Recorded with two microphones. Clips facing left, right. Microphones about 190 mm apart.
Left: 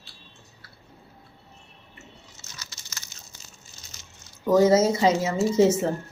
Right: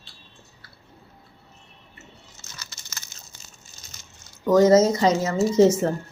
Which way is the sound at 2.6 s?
55° right (ahead or behind).